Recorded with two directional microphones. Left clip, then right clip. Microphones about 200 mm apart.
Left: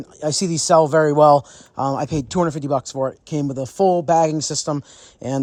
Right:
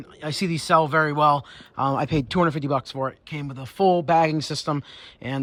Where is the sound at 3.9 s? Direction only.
20° left (ahead or behind).